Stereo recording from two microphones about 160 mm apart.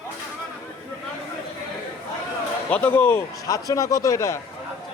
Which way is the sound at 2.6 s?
10° left (ahead or behind).